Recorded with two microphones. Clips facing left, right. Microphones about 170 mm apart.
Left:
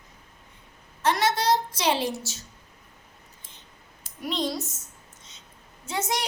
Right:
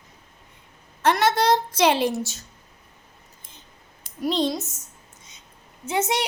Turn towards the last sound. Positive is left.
turn(degrees=-25)  # may be behind; listen again after turning